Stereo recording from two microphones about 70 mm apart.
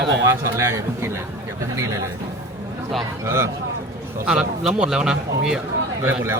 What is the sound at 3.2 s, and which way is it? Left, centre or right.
Speech, right.